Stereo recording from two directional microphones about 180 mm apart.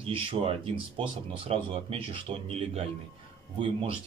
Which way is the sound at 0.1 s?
30° right (ahead or behind).